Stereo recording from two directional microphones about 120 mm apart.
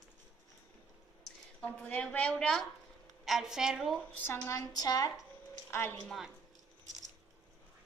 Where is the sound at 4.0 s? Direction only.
15° left (ahead or behind).